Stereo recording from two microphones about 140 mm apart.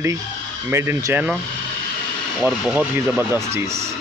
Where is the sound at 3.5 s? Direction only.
20° right (ahead or behind).